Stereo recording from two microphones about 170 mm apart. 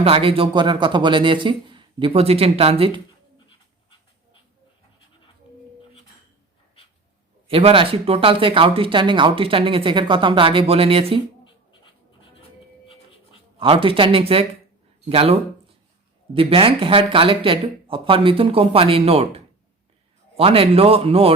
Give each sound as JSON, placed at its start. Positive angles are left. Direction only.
{"t": 0.0, "sound": "speech", "side_deg": -35}
{"t": 7.4, "sound": "speech", "side_deg": -35}
{"t": 13.6, "sound": "speech", "side_deg": -30}